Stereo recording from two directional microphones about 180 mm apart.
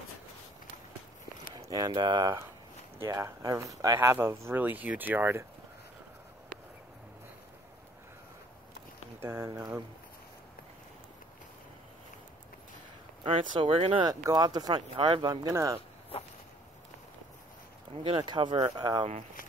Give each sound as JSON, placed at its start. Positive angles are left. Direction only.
{"t": 1.7, "sound": "speech", "side_deg": -20}
{"t": 9.2, "sound": "speech", "side_deg": -15}
{"t": 13.2, "sound": "speech", "side_deg": -30}
{"t": 17.9, "sound": "speech", "side_deg": -30}